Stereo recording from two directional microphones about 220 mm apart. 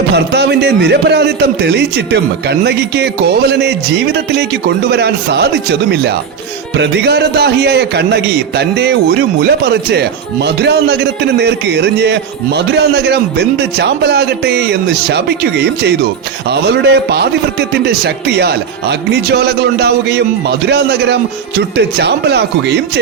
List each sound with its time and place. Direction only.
0.1 s a man's voice: 50° right (ahead or behind)